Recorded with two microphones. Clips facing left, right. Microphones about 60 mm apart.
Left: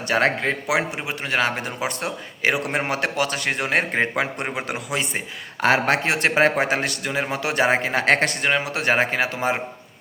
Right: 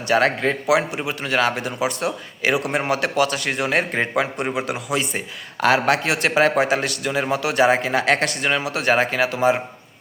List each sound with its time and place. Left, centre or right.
0.1 s a man's voice: left